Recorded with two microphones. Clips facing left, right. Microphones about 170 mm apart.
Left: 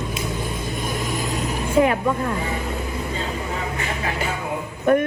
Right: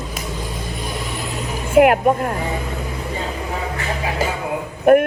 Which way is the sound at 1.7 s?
65° right (ahead or behind).